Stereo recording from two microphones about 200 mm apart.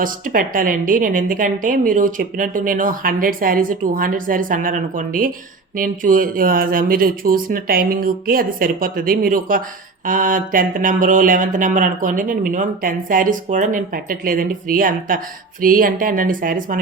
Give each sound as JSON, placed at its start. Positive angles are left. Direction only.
{"t": 0.0, "sound": "a woman's voice", "side_deg": -45}